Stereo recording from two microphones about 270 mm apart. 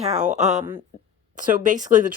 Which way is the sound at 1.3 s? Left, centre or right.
Right.